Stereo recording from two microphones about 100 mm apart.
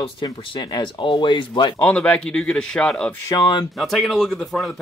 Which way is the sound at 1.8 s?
15° left (ahead or behind).